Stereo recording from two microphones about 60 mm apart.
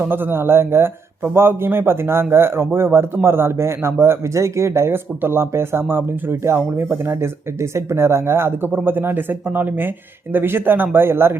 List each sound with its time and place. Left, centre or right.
0.0 s a man's voice: right